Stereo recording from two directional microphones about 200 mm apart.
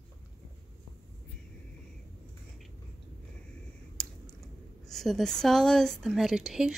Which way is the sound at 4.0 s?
5° left (ahead or behind).